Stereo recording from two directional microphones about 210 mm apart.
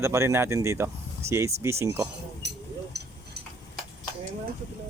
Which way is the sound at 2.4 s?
55° right (ahead or behind).